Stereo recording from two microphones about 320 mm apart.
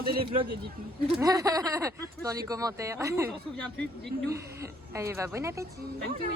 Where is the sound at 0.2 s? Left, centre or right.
Centre.